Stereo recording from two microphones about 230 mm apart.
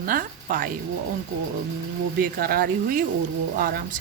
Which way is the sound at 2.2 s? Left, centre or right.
Right.